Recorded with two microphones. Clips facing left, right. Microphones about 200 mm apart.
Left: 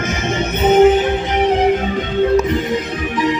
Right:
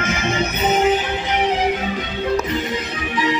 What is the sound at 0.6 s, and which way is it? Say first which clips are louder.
Music: left 8 dB; 55° left (ahead or behind).